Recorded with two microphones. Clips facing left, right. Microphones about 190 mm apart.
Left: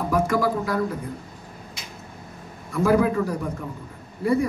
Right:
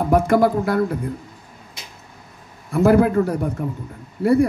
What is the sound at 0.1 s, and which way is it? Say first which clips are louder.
Speech: right 6 dB; 60° right (ahead or behind).